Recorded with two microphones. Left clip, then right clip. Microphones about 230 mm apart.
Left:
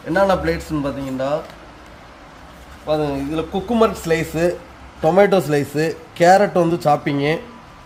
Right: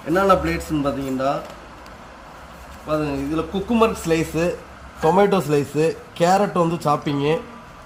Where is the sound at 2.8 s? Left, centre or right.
Left.